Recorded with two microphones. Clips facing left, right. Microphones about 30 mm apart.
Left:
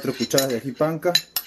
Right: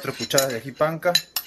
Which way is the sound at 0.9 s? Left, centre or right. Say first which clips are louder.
Right 1 dB; right.